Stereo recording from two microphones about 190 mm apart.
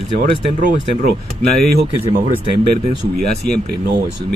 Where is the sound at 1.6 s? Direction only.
55° right (ahead or behind).